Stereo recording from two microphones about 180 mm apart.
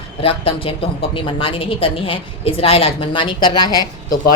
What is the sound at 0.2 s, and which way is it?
A woman's voice, 30° left (ahead or behind).